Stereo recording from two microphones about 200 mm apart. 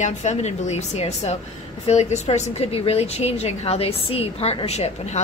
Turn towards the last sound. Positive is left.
turn(degrees=30)  # may be behind; listen again after turning